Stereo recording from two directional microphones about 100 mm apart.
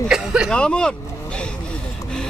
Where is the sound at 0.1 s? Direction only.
5° right (ahead or behind).